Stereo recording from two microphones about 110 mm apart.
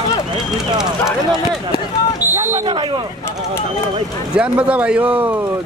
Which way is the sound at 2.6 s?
45° right (ahead or behind).